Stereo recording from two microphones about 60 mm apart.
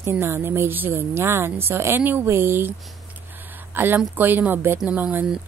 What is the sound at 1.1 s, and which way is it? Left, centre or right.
Speech, right.